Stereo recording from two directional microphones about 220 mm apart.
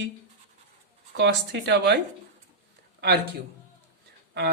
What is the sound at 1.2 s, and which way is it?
Speech, 50° right (ahead or behind).